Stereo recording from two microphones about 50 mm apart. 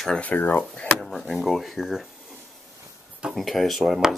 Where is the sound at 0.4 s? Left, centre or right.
Left.